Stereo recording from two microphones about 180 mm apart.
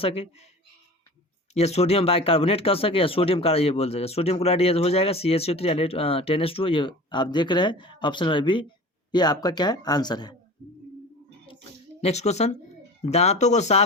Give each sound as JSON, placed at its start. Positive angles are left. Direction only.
{"t": 0.0, "sound": "speech", "side_deg": 35}
{"t": 1.5, "sound": "speech", "side_deg": 35}
{"t": 11.9, "sound": "speech", "side_deg": 35}